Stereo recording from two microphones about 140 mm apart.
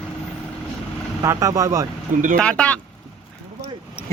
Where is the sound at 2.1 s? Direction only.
70° right (ahead or behind).